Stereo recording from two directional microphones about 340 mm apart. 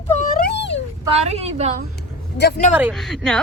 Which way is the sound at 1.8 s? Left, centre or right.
Left.